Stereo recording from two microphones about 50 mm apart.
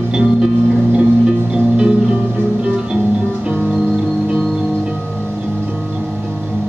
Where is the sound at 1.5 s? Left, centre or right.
Centre.